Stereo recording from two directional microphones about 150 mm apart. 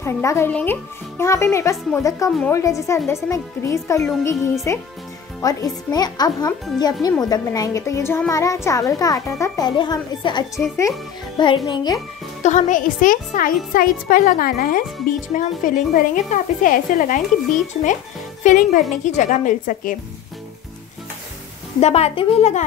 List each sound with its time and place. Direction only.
0.0 s speech: 20° left (ahead or behind)
12.4 s speech: 55° left (ahead or behind)
17.8 s a woman's voice: 50° left (ahead or behind)
21.7 s a woman's voice: 45° left (ahead or behind)